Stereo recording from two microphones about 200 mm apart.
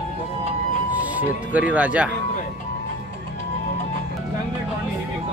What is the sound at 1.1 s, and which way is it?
Speech, 5° right (ahead or behind).